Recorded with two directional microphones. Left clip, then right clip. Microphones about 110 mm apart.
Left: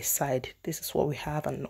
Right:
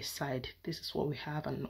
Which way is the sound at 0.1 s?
35° left (ahead or behind).